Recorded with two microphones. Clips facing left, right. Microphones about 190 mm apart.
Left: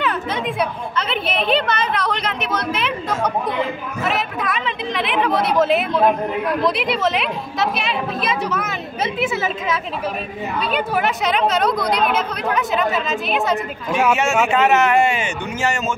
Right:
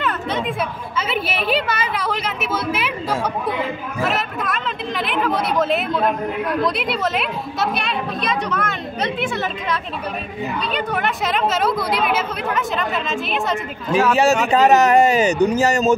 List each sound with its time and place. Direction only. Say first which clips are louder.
0.0 s speech: even; centre (ahead or behind)
4.0 s speech: even; centre (ahead or behind)
14.1 s speech: right 2 dB; 35° right (ahead or behind)